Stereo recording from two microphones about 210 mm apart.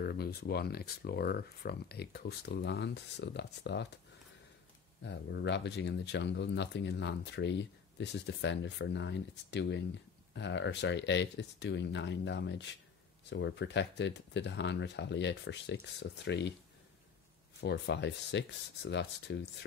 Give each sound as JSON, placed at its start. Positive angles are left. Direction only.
{"t": 0.0, "sound": "speech", "side_deg": 50}
{"t": 5.0, "sound": "speech", "side_deg": 55}
{"t": 17.6, "sound": "speech", "side_deg": 55}